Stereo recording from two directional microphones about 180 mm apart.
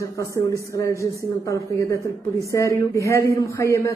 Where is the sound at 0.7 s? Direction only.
15° left (ahead or behind).